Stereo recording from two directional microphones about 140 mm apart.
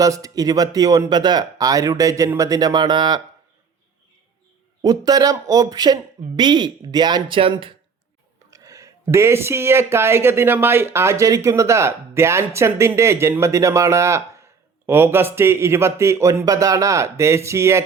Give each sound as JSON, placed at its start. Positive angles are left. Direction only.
{"t": 0.0, "sound": "speech", "side_deg": -25}
{"t": 4.8, "sound": "speech", "side_deg": -25}
{"t": 8.4, "sound": "speech", "side_deg": -25}